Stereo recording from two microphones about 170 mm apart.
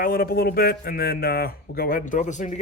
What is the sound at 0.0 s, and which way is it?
Speech, 60° left (ahead or behind).